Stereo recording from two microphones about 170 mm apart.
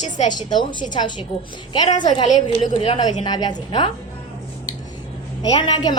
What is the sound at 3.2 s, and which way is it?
Speech, 25° left (ahead or behind).